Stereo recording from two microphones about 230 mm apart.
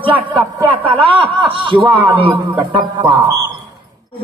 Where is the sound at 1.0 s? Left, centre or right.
Right.